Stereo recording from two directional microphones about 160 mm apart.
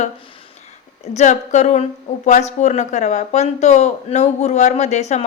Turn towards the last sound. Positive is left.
turn(degrees=45)  # may be behind; listen again after turning